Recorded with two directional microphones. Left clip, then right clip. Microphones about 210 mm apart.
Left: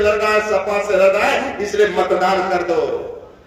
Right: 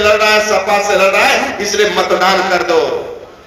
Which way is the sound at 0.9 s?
55° left (ahead or behind).